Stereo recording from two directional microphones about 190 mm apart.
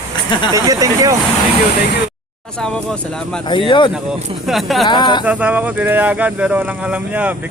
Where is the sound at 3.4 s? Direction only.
25° left (ahead or behind).